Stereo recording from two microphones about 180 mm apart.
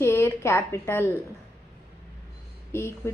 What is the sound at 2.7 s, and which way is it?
Speech, 15° left (ahead or behind).